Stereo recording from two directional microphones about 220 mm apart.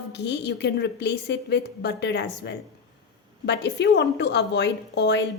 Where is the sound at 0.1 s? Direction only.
50° left (ahead or behind).